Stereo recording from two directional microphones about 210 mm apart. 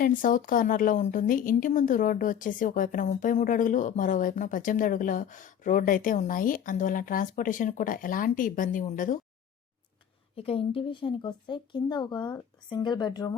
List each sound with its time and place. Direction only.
0.0 s a woman's voice: 40° left (ahead or behind)
10.3 s speech: 25° left (ahead or behind)